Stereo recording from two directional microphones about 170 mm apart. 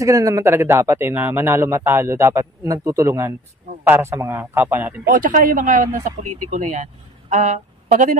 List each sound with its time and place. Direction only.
0.0 s speech: 20° right (ahead or behind)
5.1 s speech: 55° right (ahead or behind)